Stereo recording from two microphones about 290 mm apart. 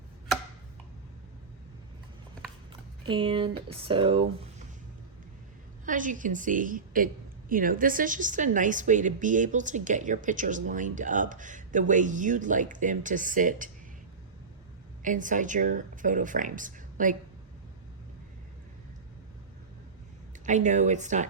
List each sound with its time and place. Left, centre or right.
3.1 s speech: centre
5.8 s a woman's voice: right
15.0 s a woman's voice: right
20.4 s a woman's voice: right